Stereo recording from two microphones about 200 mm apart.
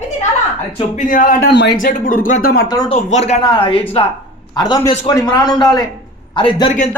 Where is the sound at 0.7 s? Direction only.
40° left (ahead or behind); by 1.8 s 55° left (ahead or behind).